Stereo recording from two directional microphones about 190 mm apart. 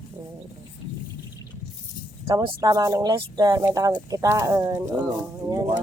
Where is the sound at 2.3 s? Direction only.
20° right (ahead or behind).